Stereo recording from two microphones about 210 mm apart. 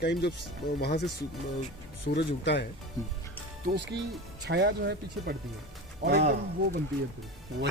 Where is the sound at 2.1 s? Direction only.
55° left (ahead or behind).